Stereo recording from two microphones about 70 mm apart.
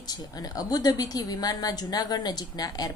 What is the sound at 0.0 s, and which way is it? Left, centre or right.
A woman's voice, left.